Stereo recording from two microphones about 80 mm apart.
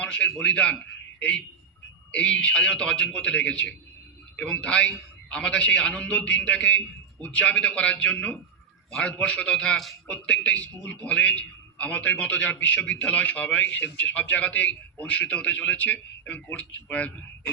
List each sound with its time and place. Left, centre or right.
0.0 s a man's voice: centre
2.1 s a man's voice: centre